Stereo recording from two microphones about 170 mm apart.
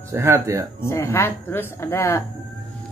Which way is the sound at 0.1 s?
15° right (ahead or behind).